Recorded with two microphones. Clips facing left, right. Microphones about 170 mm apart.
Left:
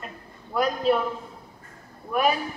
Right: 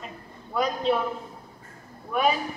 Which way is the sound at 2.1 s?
5° left (ahead or behind).